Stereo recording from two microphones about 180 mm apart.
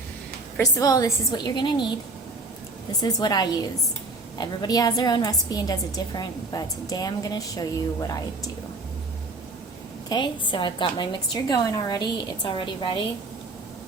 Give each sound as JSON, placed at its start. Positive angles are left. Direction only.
{"t": 0.5, "sound": "a woman's voice", "side_deg": 20}
{"t": 3.0, "sound": "a woman's voice", "side_deg": 20}
{"t": 10.1, "sound": "a woman's voice", "side_deg": 25}